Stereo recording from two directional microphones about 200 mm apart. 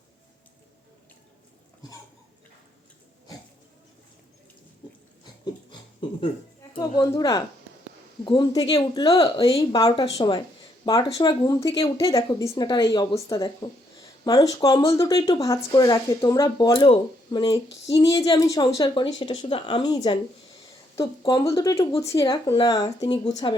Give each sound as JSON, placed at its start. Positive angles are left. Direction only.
{"t": 6.0, "sound": "a sound", "side_deg": 25}
{"t": 6.7, "sound": "speech", "side_deg": 15}
{"t": 19.3, "sound": "speech", "side_deg": 30}